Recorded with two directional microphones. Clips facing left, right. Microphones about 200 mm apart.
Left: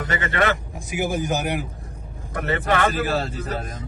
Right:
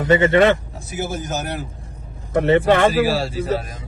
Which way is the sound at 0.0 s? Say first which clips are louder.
Right 9 dB; 25° right (ahead or behind).